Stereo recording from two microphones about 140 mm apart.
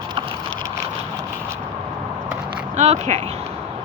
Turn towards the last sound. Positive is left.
turn(degrees=-55)  # may be behind; listen again after turning